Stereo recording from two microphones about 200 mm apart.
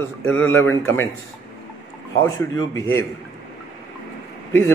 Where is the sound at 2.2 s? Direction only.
15° left (ahead or behind).